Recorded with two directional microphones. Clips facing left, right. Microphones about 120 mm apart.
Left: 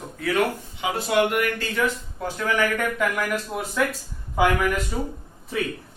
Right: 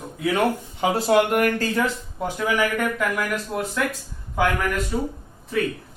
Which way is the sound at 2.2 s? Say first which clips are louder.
Right 1 dB; 10° right (ahead or behind).